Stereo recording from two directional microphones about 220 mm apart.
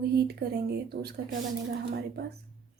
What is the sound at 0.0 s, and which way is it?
A woman's voice, 45° right (ahead or behind).